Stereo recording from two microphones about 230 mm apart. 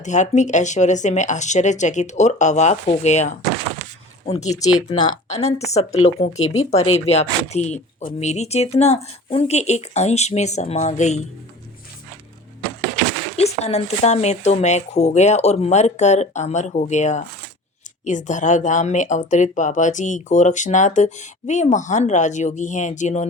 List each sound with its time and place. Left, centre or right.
0.0 s speech: left
4.9 s speech: left
13.3 s speech: left